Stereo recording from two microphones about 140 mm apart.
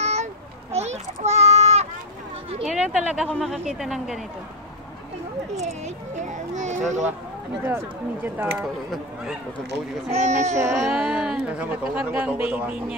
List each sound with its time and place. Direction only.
0.0 s children playing: 50° right (ahead or behind)
2.6 s speech: centre (ahead or behind)
5.6 s a child's voice: 55° right (ahead or behind)
7.6 s speech: 15° right (ahead or behind)
8.5 s speech: 5° right (ahead or behind)
10.1 s a child's voice: 55° right (ahead or behind)
10.5 s speech: 20° right (ahead or behind)
10.8 s speech: 5° right (ahead or behind)